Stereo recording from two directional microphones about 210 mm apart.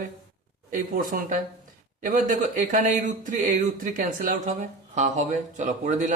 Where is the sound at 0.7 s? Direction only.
40° right (ahead or behind).